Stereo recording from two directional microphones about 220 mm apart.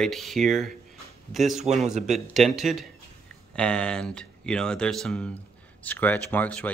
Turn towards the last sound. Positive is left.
turn(degrees=5)  # may be behind; listen again after turning